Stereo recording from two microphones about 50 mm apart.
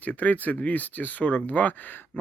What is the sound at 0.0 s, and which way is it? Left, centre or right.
Speech, left.